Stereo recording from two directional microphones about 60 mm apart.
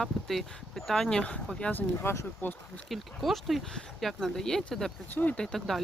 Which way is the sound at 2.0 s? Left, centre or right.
Left.